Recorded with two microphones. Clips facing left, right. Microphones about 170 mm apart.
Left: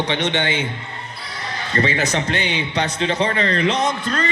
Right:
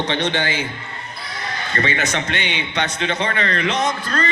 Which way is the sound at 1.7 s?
30° left (ahead or behind).